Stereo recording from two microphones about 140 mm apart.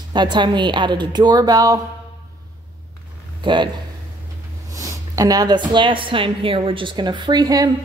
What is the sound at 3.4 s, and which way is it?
Speech, 35° right (ahead or behind).